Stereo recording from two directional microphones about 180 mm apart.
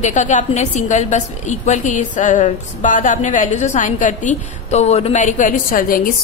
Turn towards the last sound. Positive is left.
turn(degrees=50)  # may be behind; listen again after turning